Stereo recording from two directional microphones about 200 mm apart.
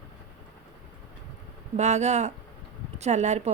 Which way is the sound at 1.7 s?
35° right (ahead or behind).